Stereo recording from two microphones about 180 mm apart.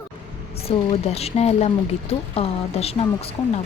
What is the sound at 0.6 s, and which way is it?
Speech, 35° left (ahead or behind).